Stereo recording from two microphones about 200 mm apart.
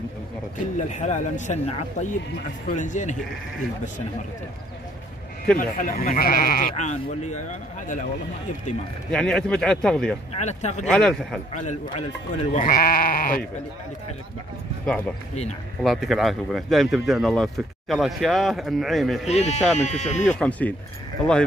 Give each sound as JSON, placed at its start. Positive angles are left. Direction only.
{"t": 0.7, "sound": "speech", "side_deg": 35}
{"t": 5.6, "sound": "speech", "side_deg": 45}
{"t": 9.1, "sound": "speech", "side_deg": 5}
{"t": 10.3, "sound": "speech", "side_deg": 35}
{"t": 10.9, "sound": "speech", "side_deg": 5}
{"t": 11.5, "sound": "speech", "side_deg": 40}
{"t": 15.8, "sound": "speech", "side_deg": 0}
{"t": 19.2, "sound": "speech", "side_deg": 35}
{"t": 20.3, "sound": "speech", "side_deg": 5}